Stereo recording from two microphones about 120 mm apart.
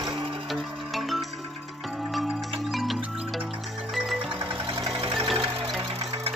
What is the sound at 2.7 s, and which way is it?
Music, centre (ahead or behind).